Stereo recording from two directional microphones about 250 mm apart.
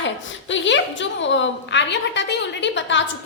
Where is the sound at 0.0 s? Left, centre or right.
Left.